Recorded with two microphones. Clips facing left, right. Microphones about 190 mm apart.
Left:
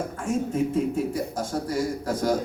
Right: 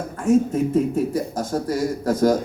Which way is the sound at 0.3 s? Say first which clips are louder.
Right 8 dB; 40° right (ahead or behind).